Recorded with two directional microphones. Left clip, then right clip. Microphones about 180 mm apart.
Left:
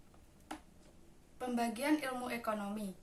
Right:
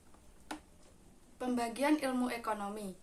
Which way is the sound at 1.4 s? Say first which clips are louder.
Right 3 dB; 10° right (ahead or behind).